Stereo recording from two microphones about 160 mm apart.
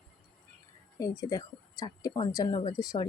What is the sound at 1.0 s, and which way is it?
Speech, 20° left (ahead or behind).